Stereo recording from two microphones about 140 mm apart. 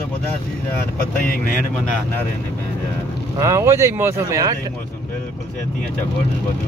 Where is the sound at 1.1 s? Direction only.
90° left.